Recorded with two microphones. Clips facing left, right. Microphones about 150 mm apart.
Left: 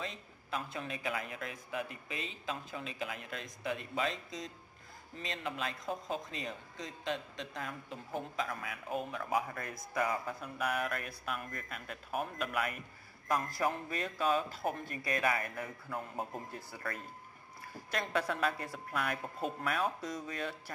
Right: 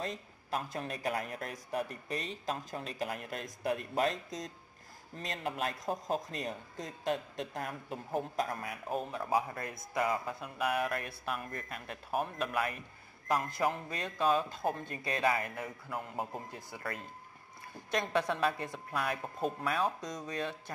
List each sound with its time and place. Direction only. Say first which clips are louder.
0.0 s a sound: right 4 dB; 45° right (ahead or behind)
1.0 s a man's voice: right 4 dB; 45° right (ahead or behind); by 16.8 s 20° right (ahead or behind)
17.9 s speech: right 3 dB; 25° right (ahead or behind)